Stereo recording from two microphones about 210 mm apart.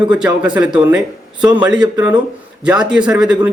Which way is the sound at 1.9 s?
15° right (ahead or behind).